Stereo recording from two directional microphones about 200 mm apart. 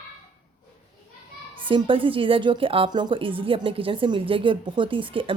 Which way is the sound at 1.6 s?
25° right (ahead or behind).